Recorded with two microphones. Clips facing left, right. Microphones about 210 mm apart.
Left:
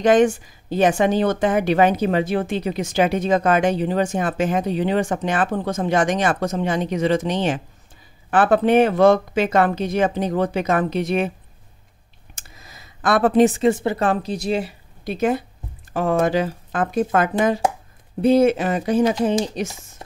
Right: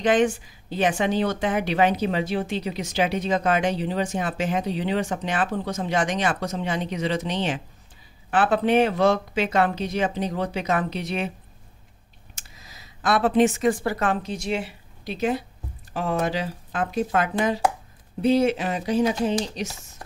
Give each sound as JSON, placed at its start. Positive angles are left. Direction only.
{"t": 0.0, "sound": "speech", "side_deg": 45}
{"t": 12.4, "sound": "a sound", "side_deg": 50}
{"t": 13.4, "sound": "speech", "side_deg": 30}
{"t": 14.0, "sound": "a woman's voice", "side_deg": 35}